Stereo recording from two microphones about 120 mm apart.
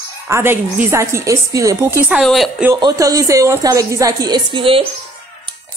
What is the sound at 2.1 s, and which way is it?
Speech, centre (ahead or behind).